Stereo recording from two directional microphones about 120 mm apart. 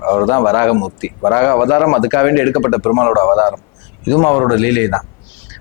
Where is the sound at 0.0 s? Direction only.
20° left (ahead or behind).